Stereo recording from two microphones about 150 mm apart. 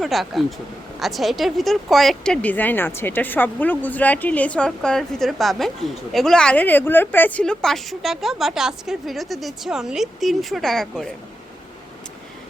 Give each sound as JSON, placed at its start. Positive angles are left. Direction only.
{"t": 0.0, "sound": "a woman's voice", "side_deg": 0}